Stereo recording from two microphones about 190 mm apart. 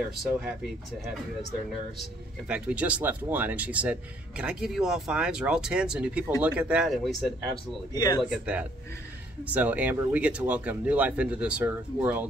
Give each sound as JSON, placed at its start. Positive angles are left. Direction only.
{"t": 2.0, "sound": "speech", "side_deg": -5}
{"t": 7.9, "sound": "speech", "side_deg": 20}
{"t": 8.2, "sound": "speech", "side_deg": -5}